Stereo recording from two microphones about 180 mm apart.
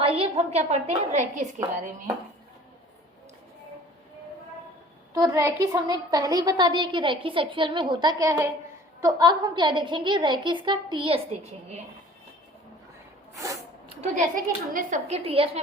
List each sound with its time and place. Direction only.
0.0 s a woman's voice: 30° right (ahead or behind)
5.1 s a woman's voice: 20° right (ahead or behind); by 11.5 s 35° right (ahead or behind)
14.0 s a woman's voice: 45° right (ahead or behind)